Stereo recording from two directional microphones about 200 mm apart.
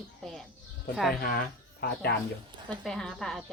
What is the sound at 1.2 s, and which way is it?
Speech, 45° left (ahead or behind).